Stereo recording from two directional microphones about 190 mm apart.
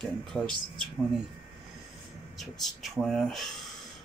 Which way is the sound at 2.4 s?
Centre (ahead or behind).